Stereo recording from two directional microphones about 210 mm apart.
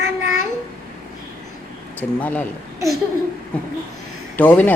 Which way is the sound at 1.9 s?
5° left (ahead or behind).